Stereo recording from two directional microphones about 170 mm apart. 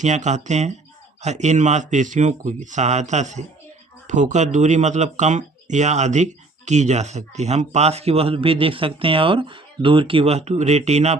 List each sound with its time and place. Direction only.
0.0 s speech: 45° right (ahead or behind)